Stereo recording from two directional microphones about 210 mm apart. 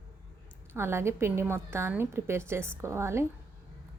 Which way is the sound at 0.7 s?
10° right (ahead or behind).